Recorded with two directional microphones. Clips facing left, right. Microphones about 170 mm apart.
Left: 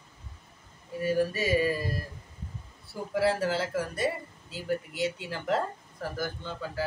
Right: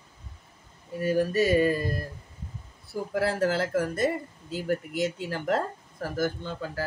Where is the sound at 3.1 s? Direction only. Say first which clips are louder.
Right 1 dB; 50° right (ahead or behind).